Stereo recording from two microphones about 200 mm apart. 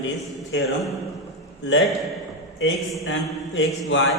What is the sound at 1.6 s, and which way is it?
Speech, 65° left (ahead or behind).